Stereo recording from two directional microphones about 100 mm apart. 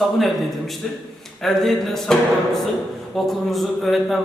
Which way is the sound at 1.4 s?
5° left (ahead or behind).